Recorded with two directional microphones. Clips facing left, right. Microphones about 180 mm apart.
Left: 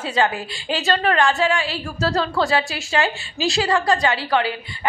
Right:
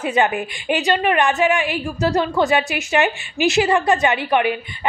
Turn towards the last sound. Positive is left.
turn(degrees=-20)  # may be behind; listen again after turning